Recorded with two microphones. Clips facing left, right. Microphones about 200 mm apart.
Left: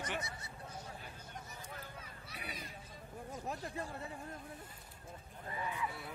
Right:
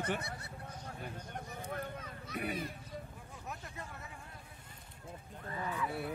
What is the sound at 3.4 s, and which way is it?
Speech, 30° left (ahead or behind).